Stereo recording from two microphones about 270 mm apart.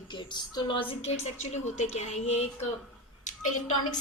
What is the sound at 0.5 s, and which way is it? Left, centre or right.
A woman's voice, centre.